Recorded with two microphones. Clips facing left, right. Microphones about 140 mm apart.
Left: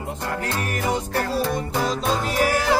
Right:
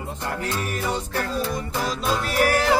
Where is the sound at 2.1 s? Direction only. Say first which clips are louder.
Right 2 dB; 15° left (ahead or behind).